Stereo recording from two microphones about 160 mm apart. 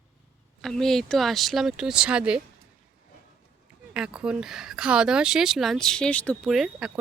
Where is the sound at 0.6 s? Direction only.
Centre (ahead or behind).